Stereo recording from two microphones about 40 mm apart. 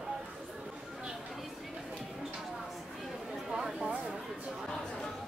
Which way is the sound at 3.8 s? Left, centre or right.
Right.